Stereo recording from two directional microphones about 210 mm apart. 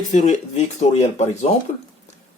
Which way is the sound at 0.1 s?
35° left (ahead or behind).